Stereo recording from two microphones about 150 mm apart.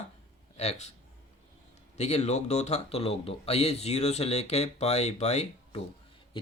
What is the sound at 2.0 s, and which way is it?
Speech, 45° left (ahead or behind).